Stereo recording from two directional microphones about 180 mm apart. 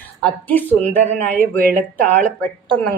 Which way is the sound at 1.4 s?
55° right (ahead or behind).